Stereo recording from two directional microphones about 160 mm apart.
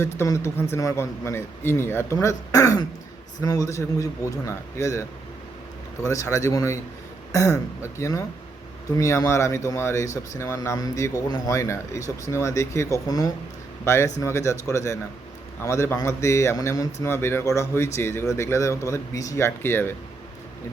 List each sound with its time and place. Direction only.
0.0 s a man's voice: 15° left (ahead or behind)